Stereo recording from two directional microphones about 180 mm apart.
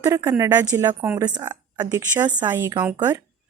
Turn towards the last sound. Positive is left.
turn(degrees=-15)  # may be behind; listen again after turning